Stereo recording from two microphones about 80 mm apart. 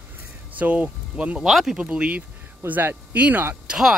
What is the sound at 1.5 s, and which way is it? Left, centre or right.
Speech, centre.